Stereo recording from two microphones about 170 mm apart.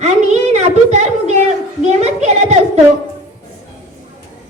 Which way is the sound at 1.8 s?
40° right (ahead or behind).